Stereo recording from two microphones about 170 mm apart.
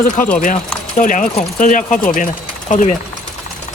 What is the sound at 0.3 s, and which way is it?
Speech, 45° left (ahead or behind).